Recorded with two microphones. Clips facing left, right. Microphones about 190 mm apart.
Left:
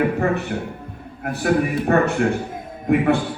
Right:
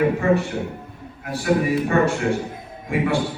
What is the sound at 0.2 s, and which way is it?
Speech, 60° left (ahead or behind).